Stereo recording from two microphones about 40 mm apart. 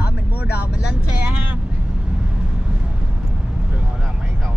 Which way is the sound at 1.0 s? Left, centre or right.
Right.